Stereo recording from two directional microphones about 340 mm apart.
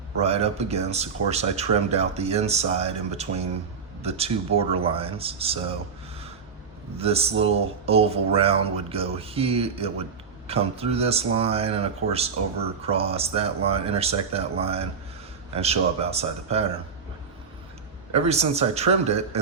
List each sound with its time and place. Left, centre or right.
0.2 s speech: centre
6.9 s speech: centre
18.1 s a man's voice: centre